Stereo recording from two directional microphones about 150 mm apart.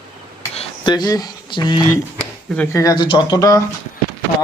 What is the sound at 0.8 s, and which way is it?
Speech, 30° left (ahead or behind).